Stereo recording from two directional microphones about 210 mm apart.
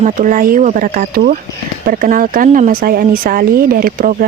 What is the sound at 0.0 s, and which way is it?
Speech, 40° right (ahead or behind).